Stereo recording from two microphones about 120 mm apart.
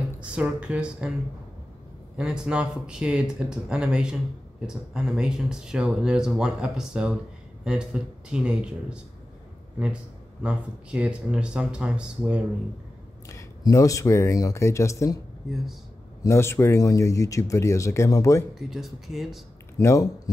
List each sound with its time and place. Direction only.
0.2 s speech: 10° right (ahead or behind)
2.1 s speech: 5° right (ahead or behind)
10.4 s speech: 10° right (ahead or behind)
13.3 s speech: 25° left (ahead or behind)
16.3 s speech: 25° left (ahead or behind)
18.5 s speech: 5° right (ahead or behind)
19.8 s speech: 25° left (ahead or behind)